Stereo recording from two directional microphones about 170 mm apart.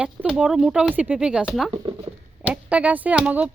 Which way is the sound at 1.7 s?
30° right (ahead or behind).